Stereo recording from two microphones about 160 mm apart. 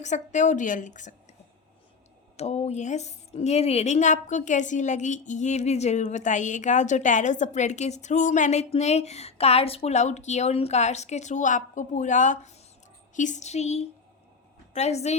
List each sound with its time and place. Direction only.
0.0 s a woman's voice: 50° left (ahead or behind)
2.3 s a woman's voice: 40° left (ahead or behind)